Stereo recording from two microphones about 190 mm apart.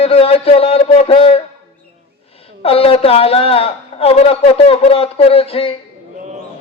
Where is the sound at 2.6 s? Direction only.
30° left (ahead or behind).